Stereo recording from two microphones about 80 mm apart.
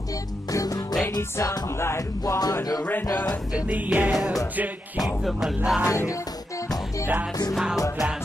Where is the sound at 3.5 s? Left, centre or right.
Centre.